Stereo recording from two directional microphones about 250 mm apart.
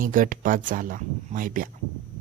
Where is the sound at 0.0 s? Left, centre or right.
Right.